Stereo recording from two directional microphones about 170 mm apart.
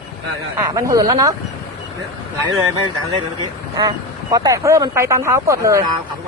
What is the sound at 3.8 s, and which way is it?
Speech, 25° right (ahead or behind).